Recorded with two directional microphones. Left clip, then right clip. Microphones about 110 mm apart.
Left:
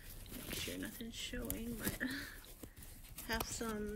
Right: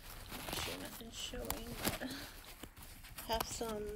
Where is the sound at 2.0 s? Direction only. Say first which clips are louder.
Left 3 dB; 30° right (ahead or behind).